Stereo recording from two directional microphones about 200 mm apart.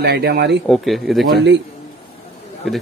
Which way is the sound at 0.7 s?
Centre (ahead or behind).